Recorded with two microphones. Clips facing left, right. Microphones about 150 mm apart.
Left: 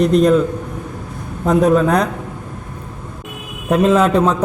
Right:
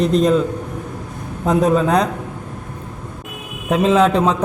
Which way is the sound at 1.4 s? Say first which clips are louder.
Left 2 dB; centre (ahead or behind).